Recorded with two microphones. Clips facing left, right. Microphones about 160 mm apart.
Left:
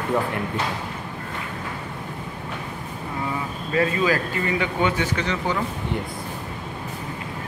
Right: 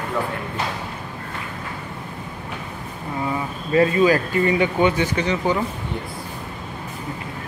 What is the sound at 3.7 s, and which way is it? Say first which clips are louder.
Speech: right 5 dB; 30° right (ahead or behind).